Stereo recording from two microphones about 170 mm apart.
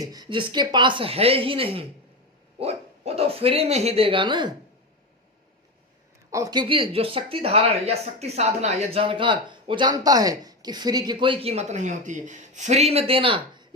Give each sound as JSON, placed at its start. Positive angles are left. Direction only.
{"t": 0.0, "sound": "speech", "side_deg": -25}
{"t": 6.3, "sound": "speech", "side_deg": -20}